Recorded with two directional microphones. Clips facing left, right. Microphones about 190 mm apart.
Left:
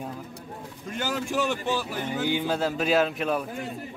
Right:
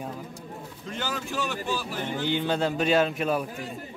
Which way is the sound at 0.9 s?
15° left (ahead or behind).